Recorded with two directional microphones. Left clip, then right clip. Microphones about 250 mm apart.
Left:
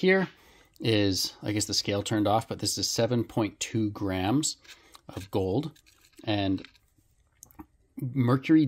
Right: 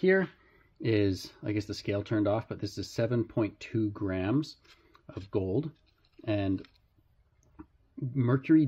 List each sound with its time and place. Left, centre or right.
0.0 s speech: left
7.3 s clicking: left